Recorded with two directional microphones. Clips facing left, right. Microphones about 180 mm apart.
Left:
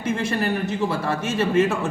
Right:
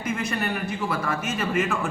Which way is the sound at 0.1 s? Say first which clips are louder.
Left 4 dB; 30° left (ahead or behind).